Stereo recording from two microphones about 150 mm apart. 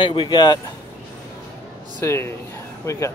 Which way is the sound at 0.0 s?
35° left (ahead or behind).